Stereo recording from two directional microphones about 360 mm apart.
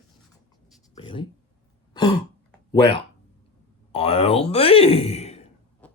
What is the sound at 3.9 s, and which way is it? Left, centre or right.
Speech, centre.